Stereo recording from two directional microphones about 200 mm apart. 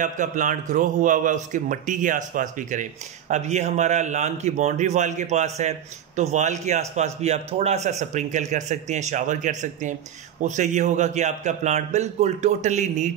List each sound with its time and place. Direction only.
0.0 s a man's voice: 40° right (ahead or behind)